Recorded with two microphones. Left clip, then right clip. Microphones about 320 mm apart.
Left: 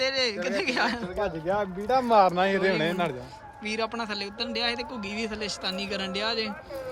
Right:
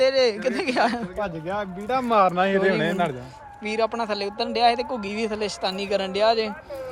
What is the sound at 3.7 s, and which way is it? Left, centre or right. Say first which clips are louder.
A man's voice: right 6 dB; centre.